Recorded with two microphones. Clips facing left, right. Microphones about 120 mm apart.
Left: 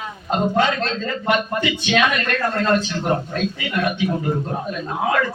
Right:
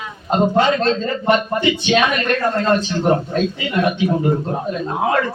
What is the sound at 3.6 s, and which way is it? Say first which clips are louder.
Speech: right 2 dB; 25° right (ahead or behind).